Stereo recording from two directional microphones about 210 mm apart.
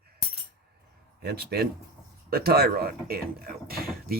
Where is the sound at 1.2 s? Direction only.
50° right (ahead or behind).